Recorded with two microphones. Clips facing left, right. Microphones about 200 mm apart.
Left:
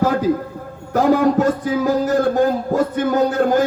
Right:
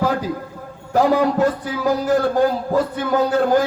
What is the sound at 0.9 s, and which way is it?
Speech, 45° left (ahead or behind).